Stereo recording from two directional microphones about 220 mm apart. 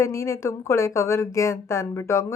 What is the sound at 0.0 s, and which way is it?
A woman's voice, 15° left (ahead or behind).